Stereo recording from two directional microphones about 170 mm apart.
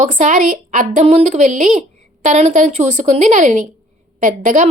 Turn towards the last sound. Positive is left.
turn(degrees=-50)  # may be behind; listen again after turning